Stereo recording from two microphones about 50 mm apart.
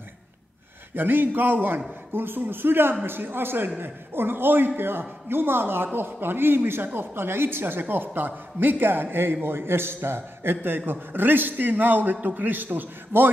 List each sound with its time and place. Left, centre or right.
0.9 s a man's voice: right